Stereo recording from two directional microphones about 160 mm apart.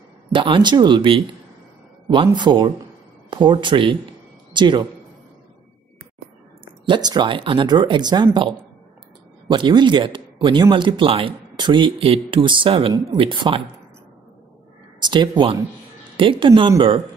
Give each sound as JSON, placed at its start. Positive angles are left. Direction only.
{"t": 0.3, "sound": "speech", "side_deg": -30}
{"t": 6.9, "sound": "speech", "side_deg": -25}
{"t": 15.0, "sound": "speech", "side_deg": -30}